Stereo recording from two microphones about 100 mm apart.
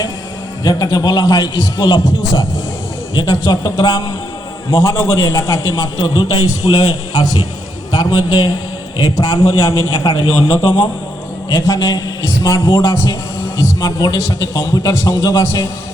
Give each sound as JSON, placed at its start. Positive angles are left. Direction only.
{"t": 0.6, "sound": "a man's voice", "side_deg": 40}
{"t": 6.0, "sound": "a man's voice", "side_deg": 70}
{"t": 6.6, "sound": "a man's voice", "side_deg": 40}
{"t": 10.1, "sound": "a man's voice", "side_deg": 65}
{"t": 11.4, "sound": "a man's voice", "side_deg": 30}